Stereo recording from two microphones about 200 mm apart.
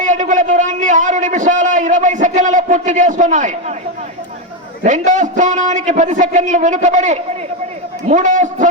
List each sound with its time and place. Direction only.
0.0 s a man's voice: 40° right (ahead or behind)
4.8 s a man's voice: 40° right (ahead or behind)